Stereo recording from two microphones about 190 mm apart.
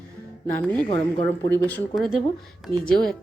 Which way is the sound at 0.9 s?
30° left (ahead or behind).